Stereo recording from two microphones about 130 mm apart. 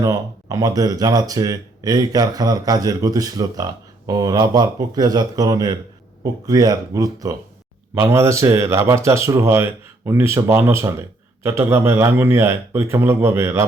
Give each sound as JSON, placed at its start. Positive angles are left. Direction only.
{"t": 0.0, "sound": "speech", "side_deg": -25}